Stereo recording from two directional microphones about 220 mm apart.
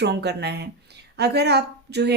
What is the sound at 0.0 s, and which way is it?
A woman's voice, 50° right (ahead or behind).